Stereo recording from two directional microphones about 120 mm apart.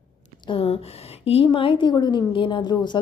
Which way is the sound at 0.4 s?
50° left (ahead or behind).